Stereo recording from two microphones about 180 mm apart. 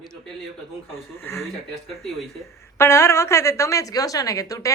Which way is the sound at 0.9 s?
15° left (ahead or behind).